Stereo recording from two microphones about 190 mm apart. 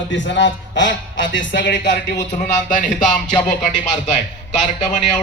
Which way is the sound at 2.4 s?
45° left (ahead or behind).